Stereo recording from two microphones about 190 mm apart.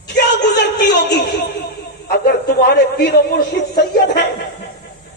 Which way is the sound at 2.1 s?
60° left (ahead or behind).